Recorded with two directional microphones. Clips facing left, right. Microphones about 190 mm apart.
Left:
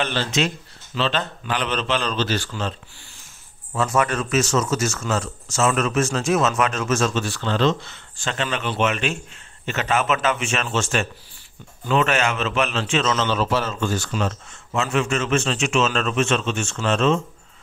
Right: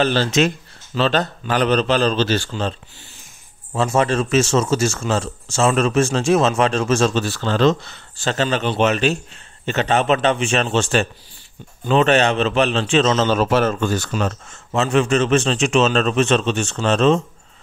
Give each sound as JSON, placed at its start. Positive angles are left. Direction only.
{"t": 0.0, "sound": "a man's voice", "side_deg": -35}
{"t": 3.7, "sound": "a man's voice", "side_deg": -25}
{"t": 13.3, "sound": "a man's voice", "side_deg": -50}